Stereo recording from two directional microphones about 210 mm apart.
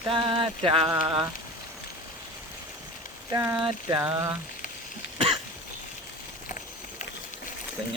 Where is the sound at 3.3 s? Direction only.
10° right (ahead or behind).